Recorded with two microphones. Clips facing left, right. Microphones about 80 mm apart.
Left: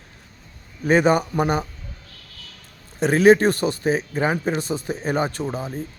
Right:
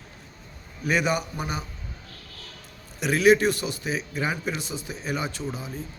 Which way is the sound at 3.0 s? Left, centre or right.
Left.